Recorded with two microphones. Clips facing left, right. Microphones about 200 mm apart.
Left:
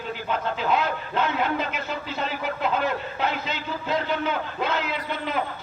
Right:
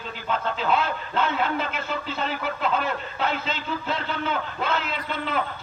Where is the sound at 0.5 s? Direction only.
15° left (ahead or behind).